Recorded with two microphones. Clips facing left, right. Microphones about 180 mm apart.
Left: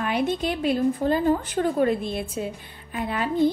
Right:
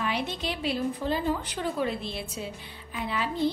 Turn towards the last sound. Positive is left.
turn(degrees=50)  # may be behind; listen again after turning